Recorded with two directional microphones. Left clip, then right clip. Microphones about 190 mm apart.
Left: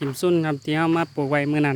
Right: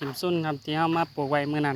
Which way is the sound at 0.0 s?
45° left (ahead or behind).